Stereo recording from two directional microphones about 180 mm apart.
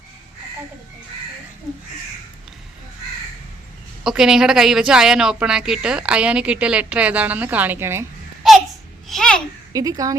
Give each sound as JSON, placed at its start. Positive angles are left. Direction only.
{"t": 4.0, "sound": "speech", "side_deg": -5}
{"t": 9.0, "sound": "babbling", "side_deg": 5}
{"t": 9.7, "sound": "speech", "side_deg": -20}